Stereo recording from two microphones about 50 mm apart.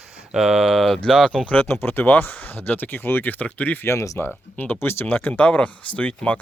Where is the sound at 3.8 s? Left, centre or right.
Left.